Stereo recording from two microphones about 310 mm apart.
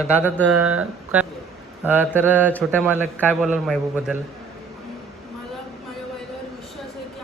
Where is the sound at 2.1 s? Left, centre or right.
Centre.